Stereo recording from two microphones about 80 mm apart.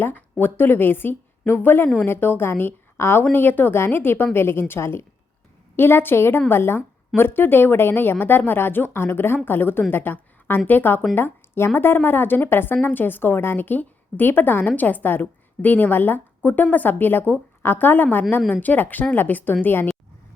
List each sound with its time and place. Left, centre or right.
0.0 s a woman's voice: left